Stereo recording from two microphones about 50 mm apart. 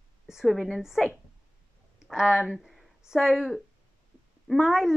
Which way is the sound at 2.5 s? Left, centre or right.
Centre.